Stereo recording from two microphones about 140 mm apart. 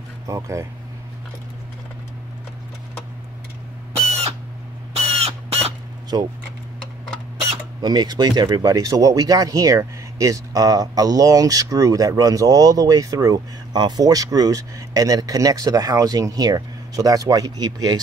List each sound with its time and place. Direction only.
0.3 s speech: 20° right (ahead or behind)
5.2 s crow: 45° right (ahead or behind)
6.1 s speech: 30° right (ahead or behind)
7.5 s speech: 30° right (ahead or behind)